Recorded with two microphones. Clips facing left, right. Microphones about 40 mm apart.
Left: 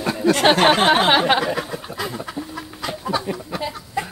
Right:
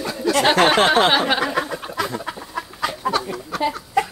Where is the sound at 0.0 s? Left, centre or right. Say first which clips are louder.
Left 2 dB; left.